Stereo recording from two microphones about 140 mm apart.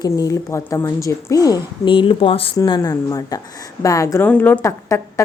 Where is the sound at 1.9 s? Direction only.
40° left (ahead or behind).